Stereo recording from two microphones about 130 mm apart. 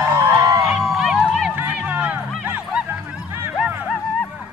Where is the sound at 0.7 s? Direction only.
5° right (ahead or behind).